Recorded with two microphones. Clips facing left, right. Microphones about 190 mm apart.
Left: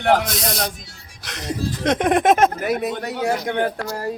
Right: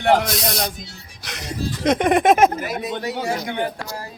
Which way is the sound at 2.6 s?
60° left (ahead or behind).